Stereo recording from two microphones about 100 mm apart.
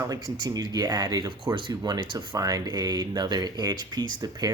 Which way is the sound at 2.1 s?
40° right (ahead or behind).